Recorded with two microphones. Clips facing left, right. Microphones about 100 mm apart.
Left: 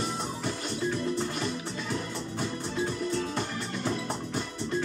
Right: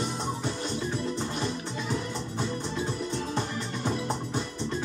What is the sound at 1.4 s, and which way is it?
Music, 20° right (ahead or behind).